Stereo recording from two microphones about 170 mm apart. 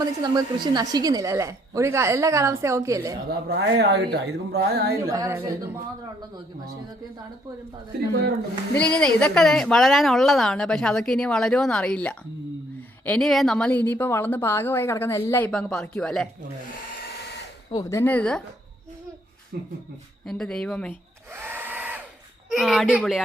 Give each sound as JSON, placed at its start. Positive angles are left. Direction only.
{"t": 0.0, "sound": "a woman's voice", "side_deg": -25}
{"t": 3.8, "sound": "speech", "side_deg": -85}
{"t": 5.0, "sound": "a woman's voice", "side_deg": -20}
{"t": 8.7, "sound": "a woman's voice", "side_deg": 5}
{"t": 17.7, "sound": "a woman's voice", "side_deg": 20}
{"t": 19.5, "sound": "speech", "side_deg": -65}
{"t": 20.2, "sound": "a woman's voice", "side_deg": 5}
{"t": 21.3, "sound": "hair dryer", "side_deg": -15}
{"t": 22.4, "sound": "a woman's voice", "side_deg": 0}